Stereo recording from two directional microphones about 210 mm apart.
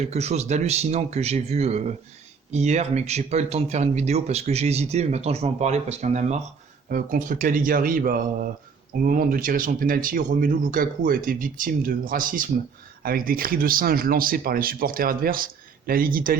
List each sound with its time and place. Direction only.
0.0 s speech: 30° right (ahead or behind)